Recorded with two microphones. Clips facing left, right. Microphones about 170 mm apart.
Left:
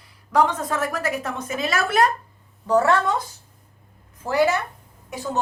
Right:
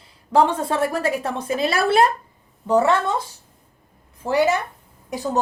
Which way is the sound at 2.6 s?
20° right (ahead or behind).